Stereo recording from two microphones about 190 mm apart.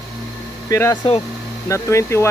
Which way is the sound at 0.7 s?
15° left (ahead or behind).